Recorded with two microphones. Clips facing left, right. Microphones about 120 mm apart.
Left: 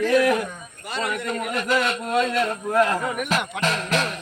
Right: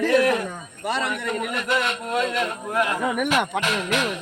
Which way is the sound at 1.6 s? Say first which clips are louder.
Left 4 dB; 20° right (ahead or behind).